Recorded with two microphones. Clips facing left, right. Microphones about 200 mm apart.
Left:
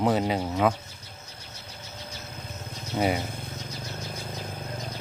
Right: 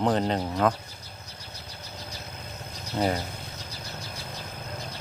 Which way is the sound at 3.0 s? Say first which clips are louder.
Left 1 dB; 5° left (ahead or behind).